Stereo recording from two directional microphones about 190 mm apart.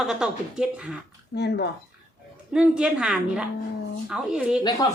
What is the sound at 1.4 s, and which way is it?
Speech, 60° left (ahead or behind).